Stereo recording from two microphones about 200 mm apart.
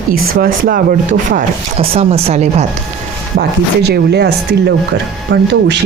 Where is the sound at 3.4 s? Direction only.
55° right (ahead or behind).